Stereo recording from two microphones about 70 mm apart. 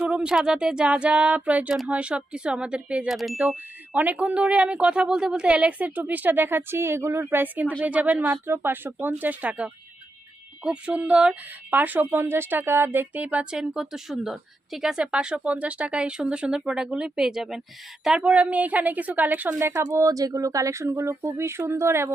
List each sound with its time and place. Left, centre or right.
0.0 s a sound: centre
0.3 s speech: centre
3.1 s ding: centre
3.5 s speech: right
8.2 s speech: right
20.0 s speech: right